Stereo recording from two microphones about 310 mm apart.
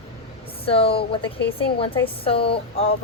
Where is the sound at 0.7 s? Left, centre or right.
Centre.